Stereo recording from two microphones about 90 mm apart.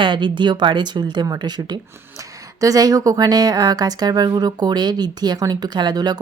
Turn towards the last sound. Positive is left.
turn(degrees=-50)  # may be behind; listen again after turning